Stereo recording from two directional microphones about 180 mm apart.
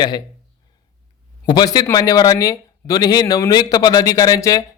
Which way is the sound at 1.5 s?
20° left (ahead or behind).